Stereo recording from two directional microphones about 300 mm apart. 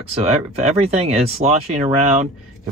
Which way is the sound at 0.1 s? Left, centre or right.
Right.